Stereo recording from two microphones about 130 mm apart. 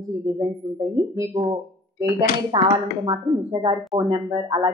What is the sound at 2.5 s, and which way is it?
A woman's voice, 40° right (ahead or behind).